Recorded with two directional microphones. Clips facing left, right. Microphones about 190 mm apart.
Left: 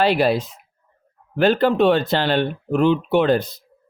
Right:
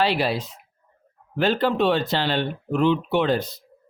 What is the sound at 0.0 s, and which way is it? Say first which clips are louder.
Speech: left 5 dB; 50° left (ahead or behind).